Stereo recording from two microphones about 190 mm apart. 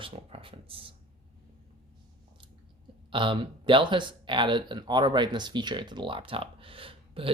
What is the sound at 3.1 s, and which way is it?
Speech, 25° right (ahead or behind).